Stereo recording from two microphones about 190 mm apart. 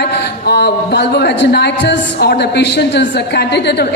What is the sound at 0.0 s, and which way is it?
Speech, 60° left (ahead or behind).